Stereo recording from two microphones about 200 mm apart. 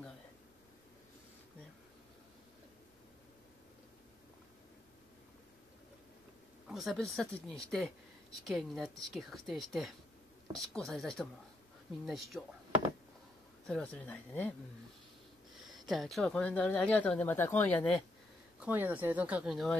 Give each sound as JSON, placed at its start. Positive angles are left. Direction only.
{"t": 6.7, "sound": "speech", "side_deg": 0}
{"t": 13.7, "sound": "speech", "side_deg": 5}
{"t": 15.6, "sound": "speech", "side_deg": 0}
{"t": 18.6, "sound": "speech", "side_deg": -10}